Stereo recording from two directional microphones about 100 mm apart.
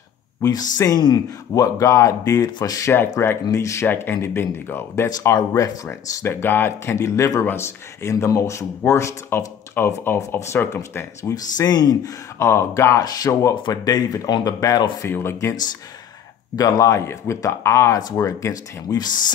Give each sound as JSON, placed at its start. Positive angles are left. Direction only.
{"t": 0.4, "sound": "speech", "side_deg": 40}
{"t": 2.9, "sound": "speech", "side_deg": 25}
{"t": 6.2, "sound": "speech", "side_deg": 20}
{"t": 11.5, "sound": "speech", "side_deg": 45}
{"t": 12.4, "sound": "speech", "side_deg": 30}
{"t": 13.0, "sound": "speech", "side_deg": 40}
{"t": 13.6, "sound": "speech", "side_deg": 45}
{"t": 15.0, "sound": "speech", "side_deg": 25}
{"t": 16.5, "sound": "speech", "side_deg": 35}